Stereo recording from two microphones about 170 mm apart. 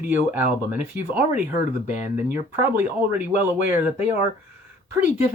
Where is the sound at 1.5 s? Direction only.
45° left (ahead or behind).